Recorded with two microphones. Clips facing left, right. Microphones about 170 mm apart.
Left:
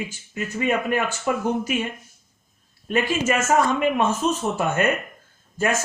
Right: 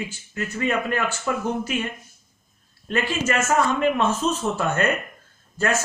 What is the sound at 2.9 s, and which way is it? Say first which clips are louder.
A man's voice: left 2 dB; 15° left (ahead or behind).